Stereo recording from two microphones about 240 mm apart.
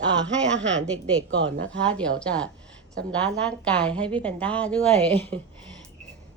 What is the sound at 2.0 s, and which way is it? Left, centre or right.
Speech, centre.